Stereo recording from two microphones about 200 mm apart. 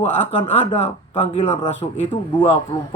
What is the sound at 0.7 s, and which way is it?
A man's voice, 30° left (ahead or behind).